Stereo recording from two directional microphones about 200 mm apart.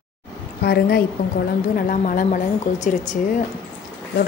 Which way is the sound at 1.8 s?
40° left (ahead or behind).